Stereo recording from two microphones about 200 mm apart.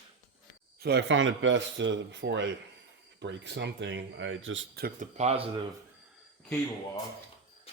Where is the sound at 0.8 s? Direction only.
60° right (ahead or behind).